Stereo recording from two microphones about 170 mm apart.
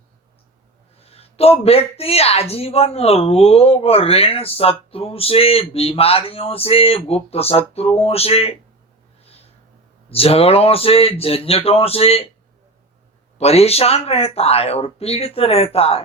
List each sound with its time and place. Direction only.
0.9 s speech: 35° left (ahead or behind)
10.1 s speech: 35° left (ahead or behind)
13.4 s speech: 35° left (ahead or behind)